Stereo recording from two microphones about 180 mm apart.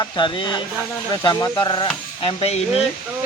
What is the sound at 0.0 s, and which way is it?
Speech, 25° left (ahead or behind).